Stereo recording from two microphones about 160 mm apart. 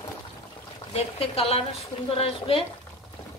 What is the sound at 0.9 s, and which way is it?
Speech, 40° left (ahead or behind).